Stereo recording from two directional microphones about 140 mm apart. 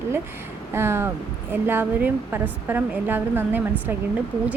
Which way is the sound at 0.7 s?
15° right (ahead or behind).